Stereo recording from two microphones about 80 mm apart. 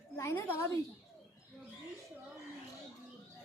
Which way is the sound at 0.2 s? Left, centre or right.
Left.